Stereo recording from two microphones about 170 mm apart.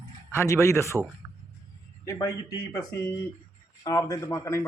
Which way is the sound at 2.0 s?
20° left (ahead or behind).